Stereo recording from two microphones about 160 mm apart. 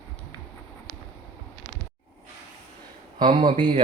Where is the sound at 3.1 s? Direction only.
30° right (ahead or behind).